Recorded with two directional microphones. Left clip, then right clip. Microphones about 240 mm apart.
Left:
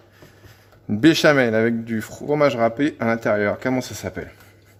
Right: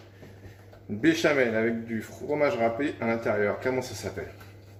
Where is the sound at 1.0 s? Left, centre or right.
Left.